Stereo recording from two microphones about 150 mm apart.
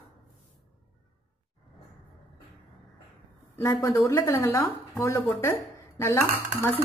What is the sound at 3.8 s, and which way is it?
Speech, 20° left (ahead or behind).